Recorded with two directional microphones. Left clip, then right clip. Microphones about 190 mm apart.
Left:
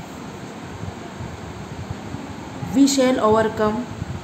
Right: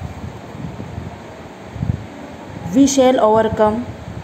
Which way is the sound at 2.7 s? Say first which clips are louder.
Right 5 dB; 25° right (ahead or behind).